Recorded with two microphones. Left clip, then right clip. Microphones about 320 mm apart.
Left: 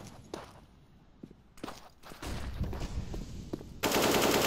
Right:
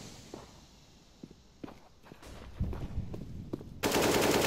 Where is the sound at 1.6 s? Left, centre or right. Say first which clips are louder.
Left 5 dB; centre.